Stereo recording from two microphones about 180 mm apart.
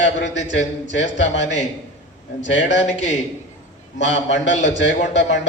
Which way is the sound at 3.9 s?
85° left.